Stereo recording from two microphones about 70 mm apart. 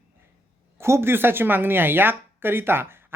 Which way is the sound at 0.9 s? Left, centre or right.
Right.